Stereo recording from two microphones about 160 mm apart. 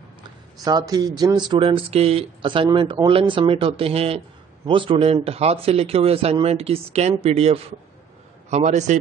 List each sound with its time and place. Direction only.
0.7 s a man's voice: 25° right (ahead or behind); by 9.0 s 45° right (ahead or behind)